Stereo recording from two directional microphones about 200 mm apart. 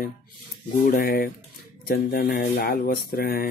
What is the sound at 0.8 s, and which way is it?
A man's voice, 45° left (ahead or behind).